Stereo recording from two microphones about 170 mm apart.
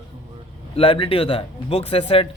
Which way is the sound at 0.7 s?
30° left (ahead or behind).